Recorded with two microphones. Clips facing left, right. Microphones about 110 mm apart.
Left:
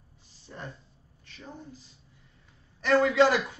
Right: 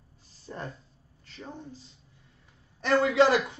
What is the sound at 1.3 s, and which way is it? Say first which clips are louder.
Speech: right 2 dB; 30° right (ahead or behind).